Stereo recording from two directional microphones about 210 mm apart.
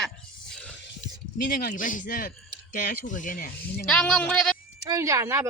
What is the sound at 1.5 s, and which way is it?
Speech, 45° left (ahead or behind).